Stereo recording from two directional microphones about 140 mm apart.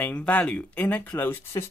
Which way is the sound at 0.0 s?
10° left (ahead or behind).